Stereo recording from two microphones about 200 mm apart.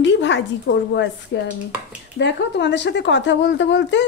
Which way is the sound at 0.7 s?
65° left (ahead or behind).